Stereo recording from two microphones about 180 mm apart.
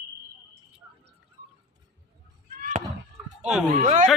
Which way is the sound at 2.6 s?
45° right (ahead or behind).